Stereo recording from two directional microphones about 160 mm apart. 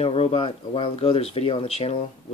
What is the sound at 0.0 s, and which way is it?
Speech, 35° left (ahead or behind).